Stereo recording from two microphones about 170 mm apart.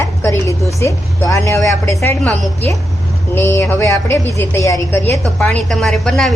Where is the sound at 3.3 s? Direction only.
15° left (ahead or behind).